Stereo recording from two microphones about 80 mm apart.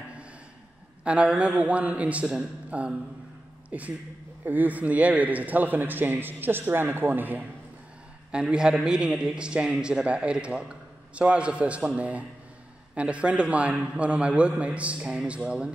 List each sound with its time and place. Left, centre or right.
1.0 s a man's voice: centre
8.3 s a man's voice: centre